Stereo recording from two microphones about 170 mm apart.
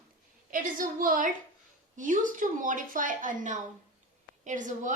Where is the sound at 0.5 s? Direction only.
55° right (ahead or behind).